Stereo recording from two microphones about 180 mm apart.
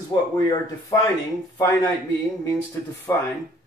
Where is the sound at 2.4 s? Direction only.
15° left (ahead or behind).